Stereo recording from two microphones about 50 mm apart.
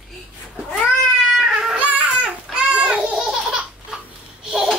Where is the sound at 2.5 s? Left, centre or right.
Right.